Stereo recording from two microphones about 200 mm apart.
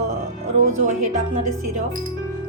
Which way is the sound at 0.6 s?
35° right (ahead or behind).